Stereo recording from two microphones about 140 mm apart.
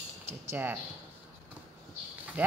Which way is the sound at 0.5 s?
15° right (ahead or behind).